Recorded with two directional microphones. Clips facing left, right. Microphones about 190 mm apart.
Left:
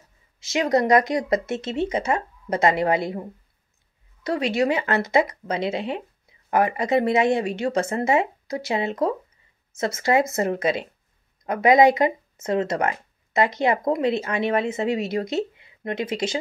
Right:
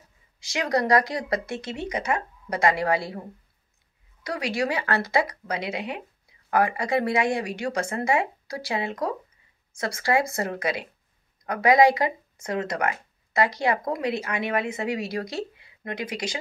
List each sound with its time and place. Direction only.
0.4 s speech: 25° left (ahead or behind)
4.2 s speech: 25° left (ahead or behind)